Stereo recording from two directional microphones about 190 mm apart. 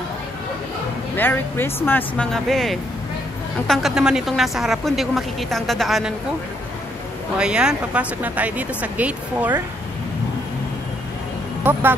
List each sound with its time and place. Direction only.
1.1 s speech: 10° left (ahead or behind)
7.3 s speech: 5° right (ahead or behind)